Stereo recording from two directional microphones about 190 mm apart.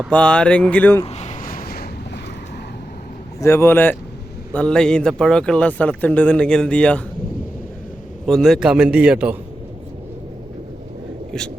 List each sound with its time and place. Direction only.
0.1 s speech: 5° left (ahead or behind)
1.0 s a sound: 35° left (ahead or behind); by 1.9 s 55° left (ahead or behind)
3.4 s speech: 15° left (ahead or behind)
8.3 s speech: centre (ahead or behind)